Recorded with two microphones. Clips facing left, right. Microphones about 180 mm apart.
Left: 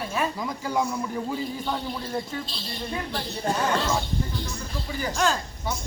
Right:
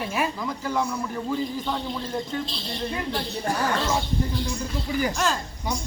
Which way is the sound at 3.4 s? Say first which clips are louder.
Left 1 dB; 25° left (ahead or behind).